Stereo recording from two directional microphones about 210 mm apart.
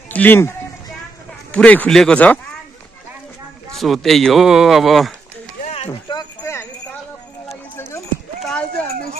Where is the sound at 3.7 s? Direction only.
Centre (ahead or behind).